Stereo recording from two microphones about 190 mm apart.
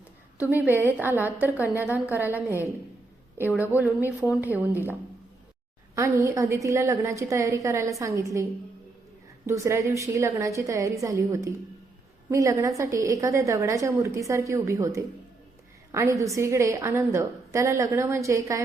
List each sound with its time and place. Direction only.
0.3 s a woman's voice: 10° right (ahead or behind)
1.8 s a woman's voice: 15° left (ahead or behind)
2.1 s a woman's voice: 10° right (ahead or behind)
9.5 s a woman's voice: 15° right (ahead or behind)